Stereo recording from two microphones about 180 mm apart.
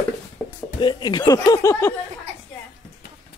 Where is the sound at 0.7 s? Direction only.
25° left (ahead or behind).